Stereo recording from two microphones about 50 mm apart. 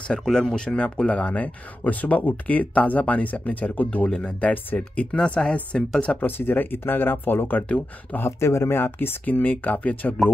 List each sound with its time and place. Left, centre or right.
0.1 s speech: centre
0.7 s speech: left
6.2 s speech: left
8.3 s speech: left
9.2 s speech: left